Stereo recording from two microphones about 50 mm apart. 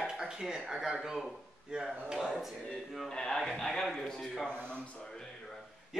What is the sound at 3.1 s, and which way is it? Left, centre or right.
A man's voice, centre.